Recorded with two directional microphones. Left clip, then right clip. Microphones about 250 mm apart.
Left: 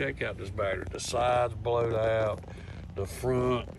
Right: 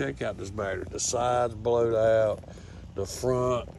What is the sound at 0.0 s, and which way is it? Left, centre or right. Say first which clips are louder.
Speech: right 1 dB; centre.